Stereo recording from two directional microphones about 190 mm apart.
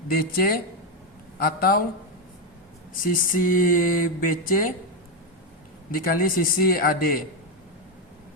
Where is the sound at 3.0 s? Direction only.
45° left (ahead or behind).